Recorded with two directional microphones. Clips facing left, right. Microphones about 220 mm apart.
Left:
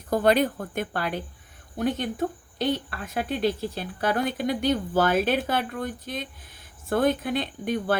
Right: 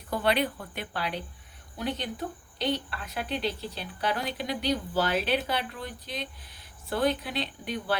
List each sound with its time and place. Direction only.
0.1 s speech: 45° left (ahead or behind)